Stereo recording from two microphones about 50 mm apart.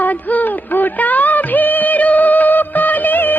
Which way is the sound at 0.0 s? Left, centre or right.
Left.